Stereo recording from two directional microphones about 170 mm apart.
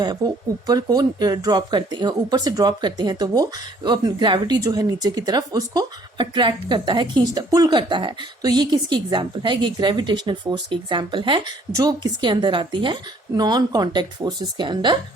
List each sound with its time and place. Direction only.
0.2 s speech: 20° right (ahead or behind)